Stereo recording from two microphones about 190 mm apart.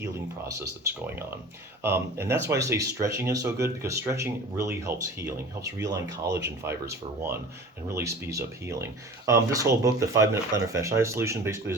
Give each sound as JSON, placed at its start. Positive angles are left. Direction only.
{"t": 1.8, "sound": "speech", "side_deg": -10}
{"t": 5.8, "sound": "speech", "side_deg": -65}
{"t": 6.4, "sound": "speech", "side_deg": -15}